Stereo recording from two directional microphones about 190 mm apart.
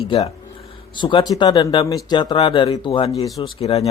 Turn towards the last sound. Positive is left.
turn(degrees=30)  # may be behind; listen again after turning